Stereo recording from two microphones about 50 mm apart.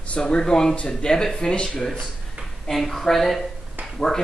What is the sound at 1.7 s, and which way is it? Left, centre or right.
A man's voice, centre.